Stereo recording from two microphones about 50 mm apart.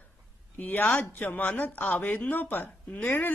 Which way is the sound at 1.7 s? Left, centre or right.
Left.